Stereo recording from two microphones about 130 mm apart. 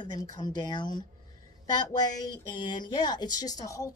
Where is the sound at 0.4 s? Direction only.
35° left (ahead or behind).